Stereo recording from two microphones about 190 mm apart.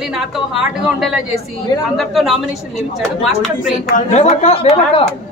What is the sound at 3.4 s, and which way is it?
Speech, centre (ahead or behind).